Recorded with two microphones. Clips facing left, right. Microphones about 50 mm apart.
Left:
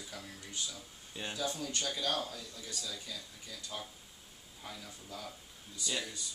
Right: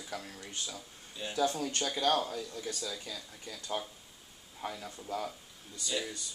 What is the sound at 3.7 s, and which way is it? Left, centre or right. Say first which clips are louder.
Speech: right 10 dB; right.